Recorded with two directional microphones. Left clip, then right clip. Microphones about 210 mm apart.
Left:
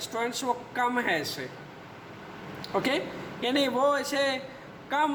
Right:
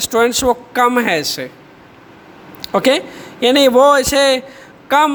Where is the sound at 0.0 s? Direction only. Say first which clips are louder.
Right 17 dB; 55° right (ahead or behind).